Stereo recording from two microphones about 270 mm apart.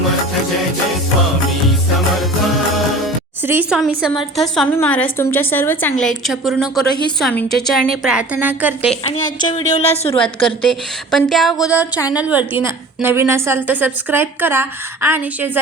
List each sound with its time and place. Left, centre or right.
3.4 s a woman's voice: centre
9.0 s a woman's voice: centre
10.2 s a woman's voice: centre